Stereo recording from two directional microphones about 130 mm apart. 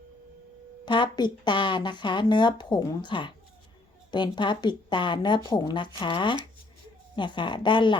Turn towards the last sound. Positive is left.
turn(degrees=35)  # may be behind; listen again after turning